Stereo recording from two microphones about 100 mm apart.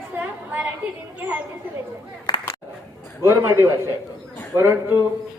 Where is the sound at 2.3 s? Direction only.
45° left (ahead or behind).